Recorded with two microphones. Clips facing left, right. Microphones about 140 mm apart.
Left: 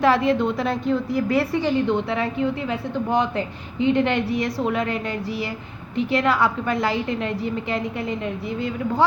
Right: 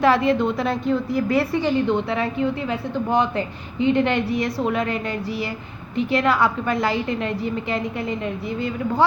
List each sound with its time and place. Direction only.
0.0 s a woman's voice: 60° right (ahead or behind); by 9.0 s 40° right (ahead or behind)